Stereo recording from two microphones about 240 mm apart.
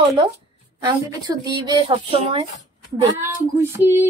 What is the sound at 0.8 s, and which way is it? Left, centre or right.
Speech, centre.